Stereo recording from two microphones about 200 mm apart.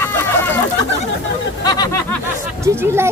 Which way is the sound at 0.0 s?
10° left (ahead or behind).